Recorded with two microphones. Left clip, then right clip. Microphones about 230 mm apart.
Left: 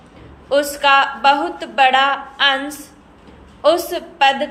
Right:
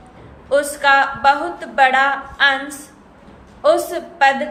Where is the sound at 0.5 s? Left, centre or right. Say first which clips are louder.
Even; centre.